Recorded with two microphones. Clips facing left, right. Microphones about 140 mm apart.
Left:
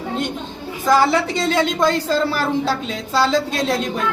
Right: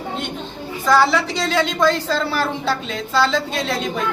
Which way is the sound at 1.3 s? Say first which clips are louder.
Left 2 dB; 50° left (ahead or behind).